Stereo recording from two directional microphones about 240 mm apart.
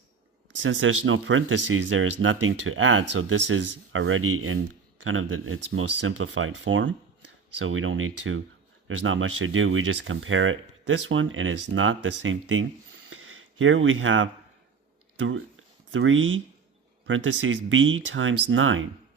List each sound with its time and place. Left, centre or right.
0.6 s speech: right
15.9 s speech: right